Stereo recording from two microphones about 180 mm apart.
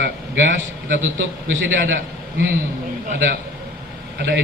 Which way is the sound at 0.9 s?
90° right.